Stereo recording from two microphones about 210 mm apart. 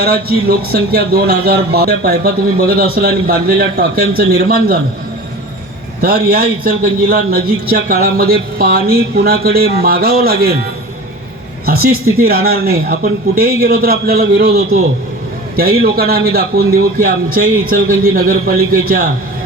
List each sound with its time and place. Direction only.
0.0 s a man's voice: 45° right (ahead or behind)
6.0 s a man's voice: 45° right (ahead or behind)
11.6 s a sound: 45° right (ahead or behind)
12.1 s a man's voice: 45° right (ahead or behind)